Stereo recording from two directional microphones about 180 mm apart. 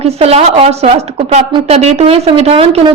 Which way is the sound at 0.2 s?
35° right (ahead or behind).